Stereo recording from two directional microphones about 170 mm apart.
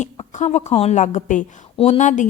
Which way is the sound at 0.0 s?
45° left (ahead or behind).